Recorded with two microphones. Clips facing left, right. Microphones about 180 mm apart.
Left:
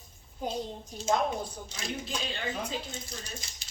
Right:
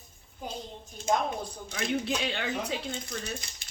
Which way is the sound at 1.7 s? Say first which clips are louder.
Right 9 dB; 70° right (ahead or behind).